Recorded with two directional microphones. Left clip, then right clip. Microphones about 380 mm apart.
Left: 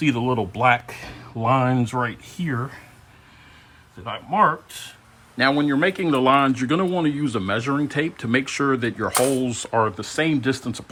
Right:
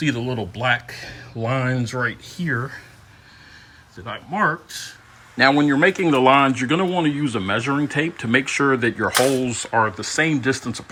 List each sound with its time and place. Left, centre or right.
0.0 s speech: left
0.5 s speech: centre
2.5 s speech: left
4.0 s speech: centre